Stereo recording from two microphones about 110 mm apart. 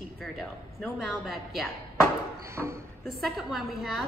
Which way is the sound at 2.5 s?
25° right (ahead or behind).